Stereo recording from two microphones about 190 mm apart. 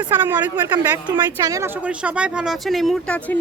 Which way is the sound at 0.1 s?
10° right (ahead or behind).